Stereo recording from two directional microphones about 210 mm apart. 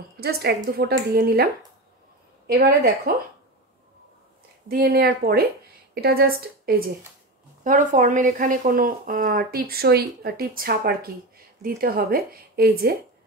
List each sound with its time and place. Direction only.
0.2 s speech: 50° right (ahead or behind)
4.6 s speech: 45° right (ahead or behind)